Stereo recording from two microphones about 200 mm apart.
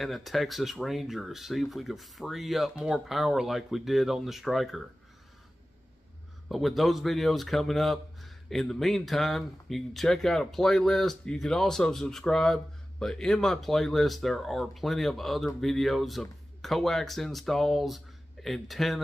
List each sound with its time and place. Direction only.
0.0 s speech: centre (ahead or behind)
6.5 s speech: centre (ahead or behind)